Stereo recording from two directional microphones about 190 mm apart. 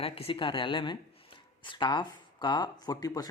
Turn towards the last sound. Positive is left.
turn(degrees=20)  # may be behind; listen again after turning